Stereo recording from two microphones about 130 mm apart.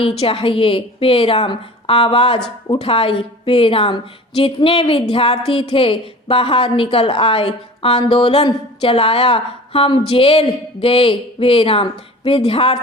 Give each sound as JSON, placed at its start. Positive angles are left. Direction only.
{"t": 0.2, "sound": "a woman's voice", "side_deg": 45}